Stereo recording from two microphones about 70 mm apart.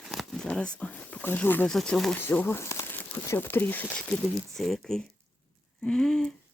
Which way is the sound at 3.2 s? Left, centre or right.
Left.